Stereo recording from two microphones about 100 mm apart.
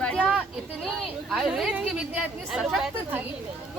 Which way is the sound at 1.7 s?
15° right (ahead or behind).